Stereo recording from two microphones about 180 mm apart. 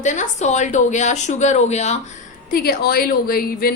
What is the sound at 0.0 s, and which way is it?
A woman's voice, 45° left (ahead or behind).